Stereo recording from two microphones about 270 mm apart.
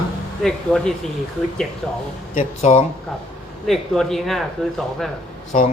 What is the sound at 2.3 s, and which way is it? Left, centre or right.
Speech, left.